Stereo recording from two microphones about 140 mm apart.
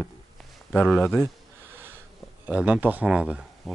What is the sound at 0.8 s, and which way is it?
Speech, centre (ahead or behind).